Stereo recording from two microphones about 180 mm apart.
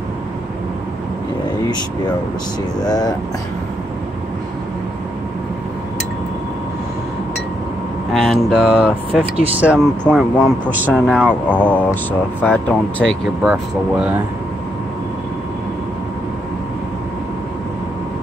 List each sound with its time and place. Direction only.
2.8 s speech: 20° left (ahead or behind)
8.1 s speech: centre (ahead or behind)
13.4 s speech: 5° right (ahead or behind)